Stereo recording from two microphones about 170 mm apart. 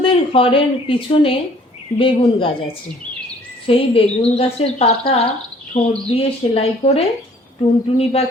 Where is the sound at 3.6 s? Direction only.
35° left (ahead or behind).